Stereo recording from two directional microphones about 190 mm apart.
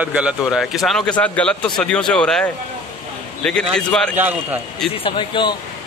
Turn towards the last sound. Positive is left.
turn(degrees=25)  # may be behind; listen again after turning